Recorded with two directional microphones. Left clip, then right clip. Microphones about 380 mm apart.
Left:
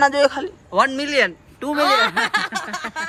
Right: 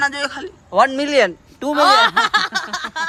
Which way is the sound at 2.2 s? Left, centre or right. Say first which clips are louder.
Right 4 dB; right.